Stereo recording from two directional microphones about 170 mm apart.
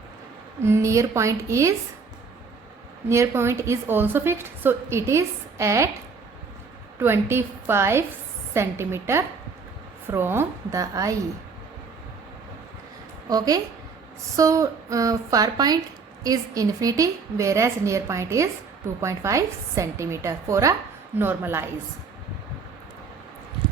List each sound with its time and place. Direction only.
0.6 s a woman's voice: 15° right (ahead or behind)
3.1 s a woman's voice: 15° right (ahead or behind)
7.0 s a woman's voice: 15° right (ahead or behind)
13.2 s a woman's voice: 20° right (ahead or behind)